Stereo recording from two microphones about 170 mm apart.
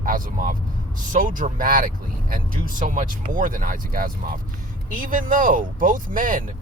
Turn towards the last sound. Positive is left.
turn(degrees=-55)  # may be behind; listen again after turning